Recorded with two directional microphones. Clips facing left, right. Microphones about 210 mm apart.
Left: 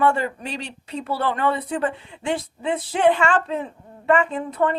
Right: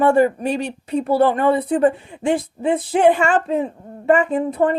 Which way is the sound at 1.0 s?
45° right (ahead or behind).